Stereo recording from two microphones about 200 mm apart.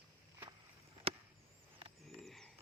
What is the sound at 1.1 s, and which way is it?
Chop, 30° right (ahead or behind).